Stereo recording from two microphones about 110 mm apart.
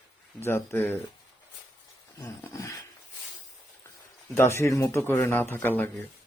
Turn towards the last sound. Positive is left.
turn(degrees=20)  # may be behind; listen again after turning